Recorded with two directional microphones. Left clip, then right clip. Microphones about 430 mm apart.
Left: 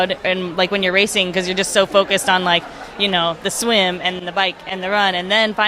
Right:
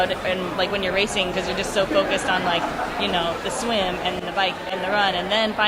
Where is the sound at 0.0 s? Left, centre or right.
Left.